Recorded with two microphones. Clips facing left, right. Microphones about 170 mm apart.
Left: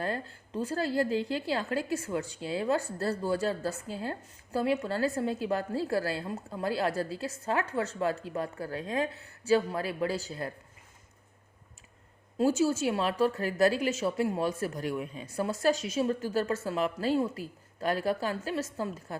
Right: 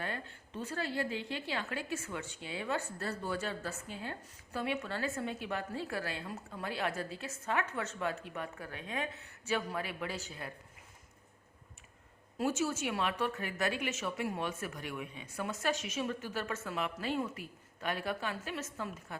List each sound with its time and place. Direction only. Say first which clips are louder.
0.0 s a woman's voice: left 7 dB; 35° left (ahead or behind)
12.4 s a woman's voice: left 7 dB; 30° left (ahead or behind)